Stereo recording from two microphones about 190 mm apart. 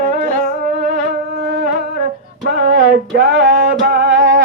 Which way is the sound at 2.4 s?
65° right (ahead or behind).